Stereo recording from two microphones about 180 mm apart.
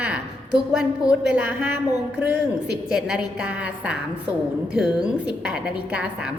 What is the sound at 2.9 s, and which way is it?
A woman's voice, 5° right (ahead or behind).